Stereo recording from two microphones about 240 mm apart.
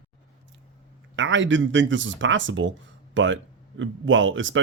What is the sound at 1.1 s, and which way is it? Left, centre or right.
Speech, right.